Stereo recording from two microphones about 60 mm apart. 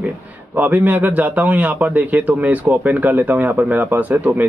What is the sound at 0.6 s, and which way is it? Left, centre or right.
A man's voice, right.